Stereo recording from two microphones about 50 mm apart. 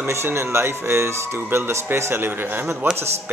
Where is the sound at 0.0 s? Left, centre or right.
Right.